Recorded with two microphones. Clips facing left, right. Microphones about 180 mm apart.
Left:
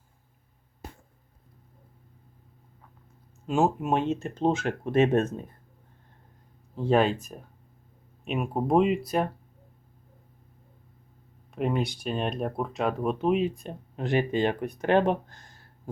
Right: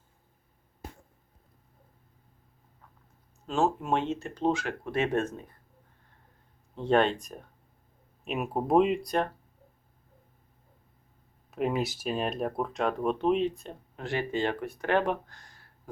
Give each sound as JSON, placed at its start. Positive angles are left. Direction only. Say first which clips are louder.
{"t": 3.4, "sound": "speech", "louder": "left 3 dB", "side_deg": 15}
{"t": 6.7, "sound": "speech", "louder": "left 1 dB", "side_deg": 5}
{"t": 11.5, "sound": "speech", "louder": "left 1 dB", "side_deg": 0}
{"t": 13.6, "sound": "speech", "louder": "left 5 dB", "side_deg": 15}